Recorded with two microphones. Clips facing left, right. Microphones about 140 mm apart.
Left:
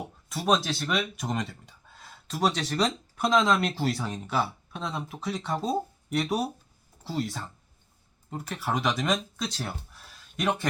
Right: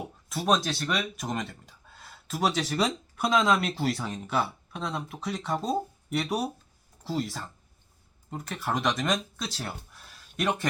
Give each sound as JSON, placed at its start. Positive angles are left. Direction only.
{"t": 0.3, "sound": "speech", "side_deg": 0}